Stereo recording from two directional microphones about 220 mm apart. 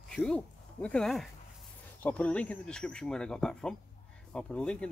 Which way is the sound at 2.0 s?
5° left (ahead or behind).